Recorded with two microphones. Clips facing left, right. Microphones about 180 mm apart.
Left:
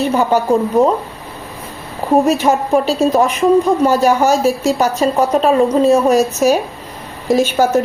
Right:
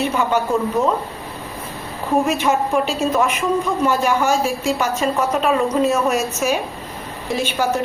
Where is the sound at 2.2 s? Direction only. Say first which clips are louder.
Left 5 dB; 35° left (ahead or behind).